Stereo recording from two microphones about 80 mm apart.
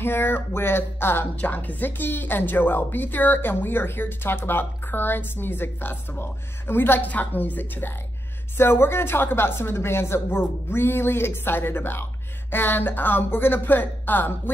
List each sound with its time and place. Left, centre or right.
0.0 s speech: left